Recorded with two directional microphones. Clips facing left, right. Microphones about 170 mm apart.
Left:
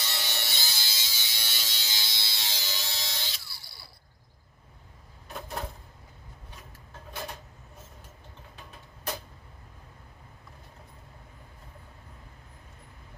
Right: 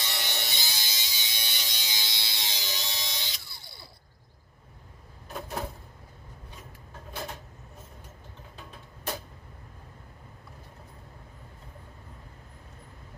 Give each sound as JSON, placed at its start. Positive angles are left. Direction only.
{"t": 0.0, "sound": "ratchet", "side_deg": -15}